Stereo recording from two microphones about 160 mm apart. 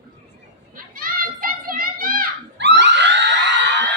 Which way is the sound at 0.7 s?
60° right (ahead or behind).